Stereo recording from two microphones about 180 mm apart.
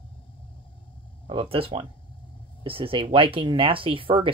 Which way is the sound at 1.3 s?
30° right (ahead or behind).